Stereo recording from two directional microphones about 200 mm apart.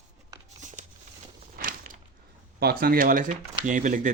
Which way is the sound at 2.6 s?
50° right (ahead or behind).